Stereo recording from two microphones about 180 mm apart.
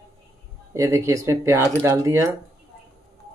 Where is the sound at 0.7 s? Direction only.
15° right (ahead or behind).